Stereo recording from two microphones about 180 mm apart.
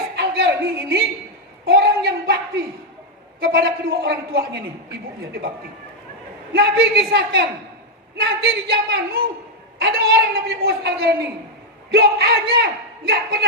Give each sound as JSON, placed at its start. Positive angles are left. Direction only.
{"t": 0.2, "sound": "a sound", "side_deg": -65}
{"t": 3.4, "sound": "a man's voice", "side_deg": -65}
{"t": 6.5, "sound": "a man's voice", "side_deg": -65}